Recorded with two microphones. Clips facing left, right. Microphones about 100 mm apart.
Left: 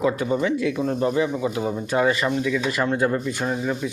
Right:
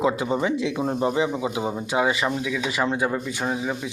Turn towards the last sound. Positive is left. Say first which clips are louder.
# left 2 dB
turn(degrees=-5)  # may be behind; listen again after turning